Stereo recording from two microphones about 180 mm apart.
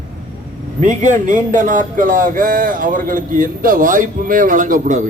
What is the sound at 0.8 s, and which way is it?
A man's voice, 45° right (ahead or behind).